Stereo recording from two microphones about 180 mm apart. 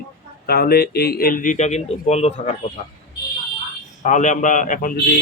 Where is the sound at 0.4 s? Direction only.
60° left (ahead or behind); by 2.6 s 35° left (ahead or behind).